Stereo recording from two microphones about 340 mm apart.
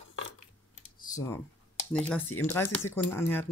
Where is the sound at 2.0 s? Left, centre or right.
Centre.